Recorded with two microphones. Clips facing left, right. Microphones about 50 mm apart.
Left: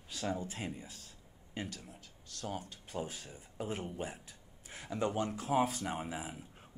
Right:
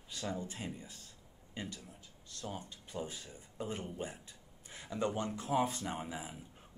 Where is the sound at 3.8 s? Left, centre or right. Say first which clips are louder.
Left 1 dB; centre.